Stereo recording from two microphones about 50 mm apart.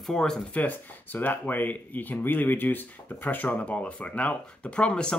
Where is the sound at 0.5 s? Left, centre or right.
Left.